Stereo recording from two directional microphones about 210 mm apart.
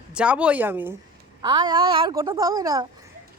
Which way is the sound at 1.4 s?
20° right (ahead or behind).